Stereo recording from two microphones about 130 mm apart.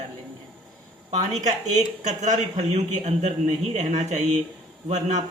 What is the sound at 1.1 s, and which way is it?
Speech, 65° right (ahead or behind).